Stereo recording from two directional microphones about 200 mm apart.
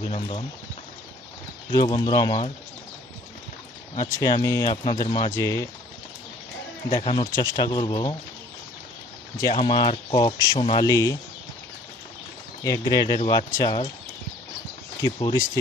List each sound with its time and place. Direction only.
0.0 s speech: 30° left (ahead or behind)
1.7 s speech: 20° left (ahead or behind)
4.2 s speech: 15° left (ahead or behind)
7.0 s speech: 20° left (ahead or behind)
9.4 s speech: 25° left (ahead or behind)
12.6 s speech: 15° left (ahead or behind)
15.0 s speech: 20° left (ahead or behind)